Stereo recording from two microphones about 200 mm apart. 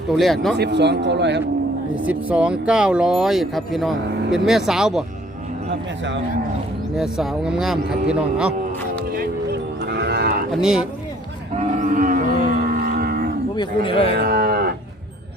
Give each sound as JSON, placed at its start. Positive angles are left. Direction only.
{"t": 0.2, "sound": "speech", "side_deg": 0}
{"t": 0.5, "sound": "speech", "side_deg": -55}
{"t": 2.0, "sound": "speech", "side_deg": -5}
{"t": 6.9, "sound": "speech", "side_deg": 0}
{"t": 9.1, "sound": "cattle", "side_deg": -55}
{"t": 10.5, "sound": "speech", "side_deg": -5}
{"t": 11.5, "sound": "a sound", "side_deg": -40}
{"t": 13.6, "sound": "a man's voice", "side_deg": 25}
{"t": 14.1, "sound": "cattle", "side_deg": -55}